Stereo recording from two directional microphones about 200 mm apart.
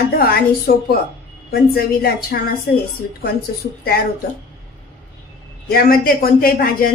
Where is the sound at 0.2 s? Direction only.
50° left (ahead or behind).